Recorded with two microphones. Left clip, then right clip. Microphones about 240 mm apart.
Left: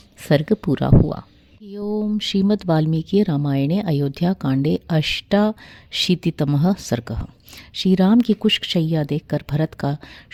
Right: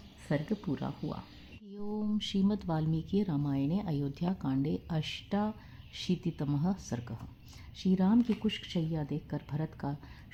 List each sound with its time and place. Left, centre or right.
0.2 s speech: left